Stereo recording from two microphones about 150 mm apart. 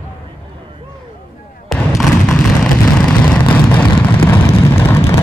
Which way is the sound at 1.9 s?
5° left (ahead or behind).